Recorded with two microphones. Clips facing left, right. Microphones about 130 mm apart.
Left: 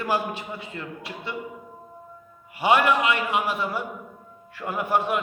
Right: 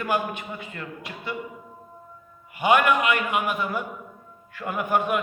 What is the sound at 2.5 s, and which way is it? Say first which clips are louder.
A man's voice: even; 30° left (ahead or behind).